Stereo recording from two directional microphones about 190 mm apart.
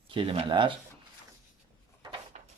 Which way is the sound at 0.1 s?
30° right (ahead or behind).